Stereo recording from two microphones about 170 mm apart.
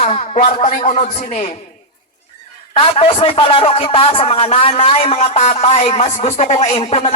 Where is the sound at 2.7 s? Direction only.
35° left (ahead or behind).